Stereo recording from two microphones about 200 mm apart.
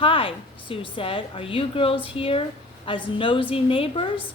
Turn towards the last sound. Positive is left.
turn(degrees=25)  # may be behind; listen again after turning